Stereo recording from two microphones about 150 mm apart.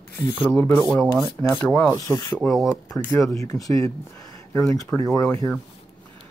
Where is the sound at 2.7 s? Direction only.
20° left (ahead or behind).